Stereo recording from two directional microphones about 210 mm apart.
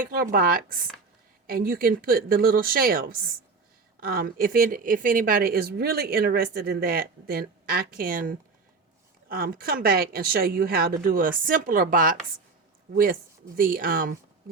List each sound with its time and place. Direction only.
0.0 s speech: 45° right (ahead or behind)
13.6 s speech: 40° right (ahead or behind)